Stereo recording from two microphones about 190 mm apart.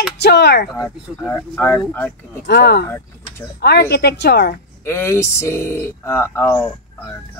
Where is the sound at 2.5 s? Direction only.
60° left (ahead or behind).